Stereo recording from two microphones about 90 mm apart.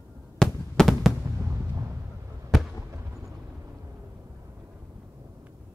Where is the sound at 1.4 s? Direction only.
35° right (ahead or behind).